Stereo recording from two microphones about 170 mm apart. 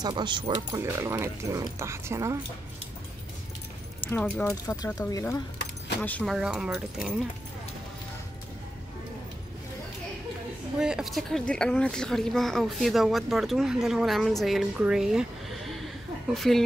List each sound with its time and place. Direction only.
0.0 s speech: 30° right (ahead or behind)
4.0 s speech: 10° left (ahead or behind)
6.0 s speech: 10° left (ahead or behind)
6.3 s a woman's voice: 5° right (ahead or behind)
10.8 s a woman's voice: 5° right (ahead or behind)